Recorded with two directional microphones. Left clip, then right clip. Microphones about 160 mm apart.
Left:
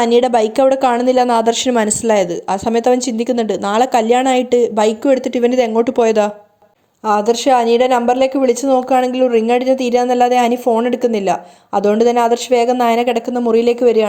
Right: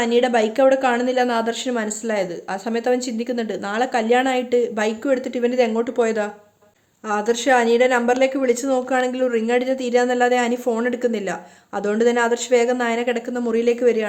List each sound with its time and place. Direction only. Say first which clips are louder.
0.0 s a woman's voice: left 6 dB; 35° left (ahead or behind)
7.1 s speech: left 6 dB; 30° left (ahead or behind)